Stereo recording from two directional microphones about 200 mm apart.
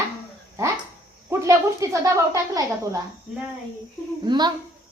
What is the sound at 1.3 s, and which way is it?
A woman's voice, 15° right (ahead or behind).